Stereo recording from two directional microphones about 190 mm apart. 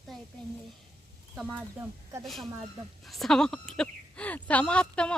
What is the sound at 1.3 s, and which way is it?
Speech, 5° right (ahead or behind).